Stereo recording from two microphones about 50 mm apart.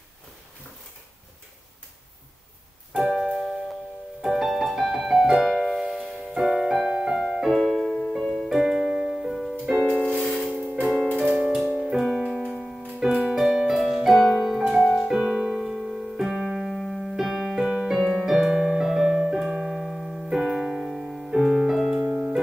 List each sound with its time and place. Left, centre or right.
3.0 s piano: centre
4.2 s music: centre
5.0 s piano: centre
5.3 s music: centre
7.5 s music: centre
8.5 s music: centre
9.8 s music: centre
10.3 s music: centre
13.0 s music: centre
15.6 s keyboard: centre
17.6 s piano: centre
21.3 s music: centre